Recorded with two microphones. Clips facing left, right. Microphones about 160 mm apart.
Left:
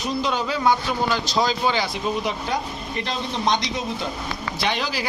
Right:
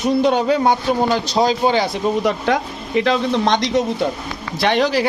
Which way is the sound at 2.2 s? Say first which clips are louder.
Right 8 dB; 65° right (ahead or behind).